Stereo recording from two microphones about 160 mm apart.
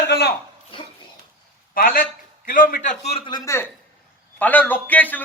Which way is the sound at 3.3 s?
15° left (ahead or behind).